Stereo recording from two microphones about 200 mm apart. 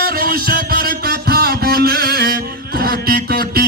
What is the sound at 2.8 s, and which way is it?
Mantra, 50° right (ahead or behind).